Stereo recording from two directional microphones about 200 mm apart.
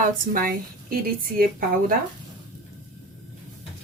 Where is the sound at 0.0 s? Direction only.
45° right (ahead or behind).